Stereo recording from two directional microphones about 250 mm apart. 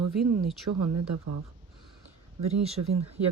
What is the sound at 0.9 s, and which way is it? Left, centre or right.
Speech, right.